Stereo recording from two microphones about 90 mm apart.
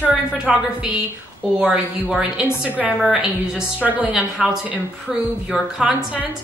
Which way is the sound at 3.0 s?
5° right (ahead or behind).